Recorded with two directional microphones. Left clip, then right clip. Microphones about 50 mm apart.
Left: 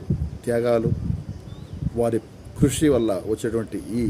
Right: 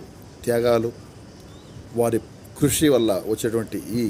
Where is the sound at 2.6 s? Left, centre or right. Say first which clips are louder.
Right 1 dB; centre.